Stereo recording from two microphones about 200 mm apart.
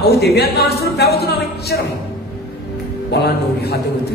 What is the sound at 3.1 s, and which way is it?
Speech, 55° left (ahead or behind).